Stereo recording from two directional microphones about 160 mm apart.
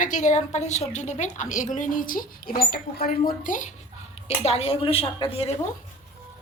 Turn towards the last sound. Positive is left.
turn(degrees=35)  # may be behind; listen again after turning